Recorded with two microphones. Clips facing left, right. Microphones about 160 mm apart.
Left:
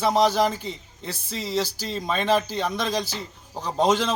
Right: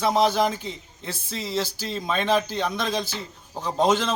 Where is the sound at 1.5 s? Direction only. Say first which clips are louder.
Left 2 dB; 35° left (ahead or behind).